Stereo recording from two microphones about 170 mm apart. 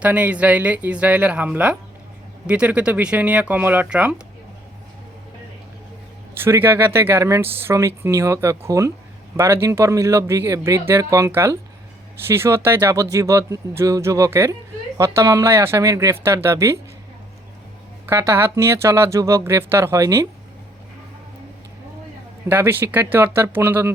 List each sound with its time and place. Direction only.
0.0 s speech: 10° right (ahead or behind)
6.3 s speech: 15° right (ahead or behind)
18.0 s speech: 15° right (ahead or behind)
22.4 s speech: 10° right (ahead or behind)